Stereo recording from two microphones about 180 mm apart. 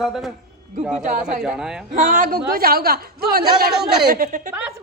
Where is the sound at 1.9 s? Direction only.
45° right (ahead or behind).